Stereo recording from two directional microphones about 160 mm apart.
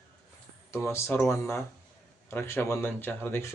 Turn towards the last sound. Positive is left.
turn(degrees=15)  # may be behind; listen again after turning